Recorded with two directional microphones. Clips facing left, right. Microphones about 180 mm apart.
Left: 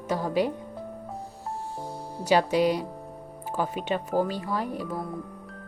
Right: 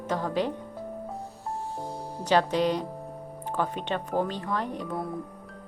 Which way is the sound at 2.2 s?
10° left (ahead or behind).